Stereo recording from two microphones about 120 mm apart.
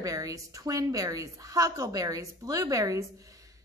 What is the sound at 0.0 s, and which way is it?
A woman's voice, 30° right (ahead or behind).